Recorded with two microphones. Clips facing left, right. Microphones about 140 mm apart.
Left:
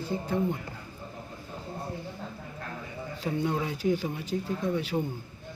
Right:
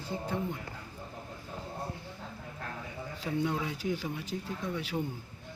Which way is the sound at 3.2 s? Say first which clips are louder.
Left 3 dB; 40° left (ahead or behind).